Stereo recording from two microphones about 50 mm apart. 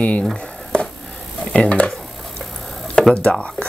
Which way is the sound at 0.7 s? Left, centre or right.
Centre.